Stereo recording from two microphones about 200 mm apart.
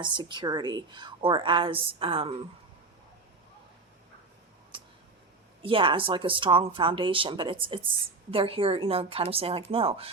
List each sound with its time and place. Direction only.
0.0 s a woman's voice: 20° right (ahead or behind)
4.7 s a sound: 25° right (ahead or behind)
5.6 s a woman's voice: 25° right (ahead or behind)